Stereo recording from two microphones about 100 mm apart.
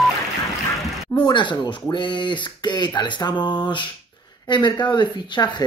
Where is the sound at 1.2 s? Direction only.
50° left (ahead or behind).